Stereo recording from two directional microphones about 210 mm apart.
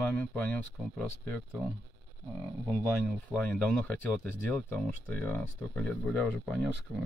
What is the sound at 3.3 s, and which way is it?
Speech, 10° left (ahead or behind).